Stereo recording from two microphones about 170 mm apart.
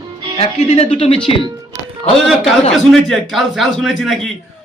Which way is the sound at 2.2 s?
Centre (ahead or behind).